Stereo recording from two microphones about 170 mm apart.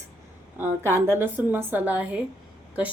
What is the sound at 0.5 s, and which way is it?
A woman's voice, 15° right (ahead or behind).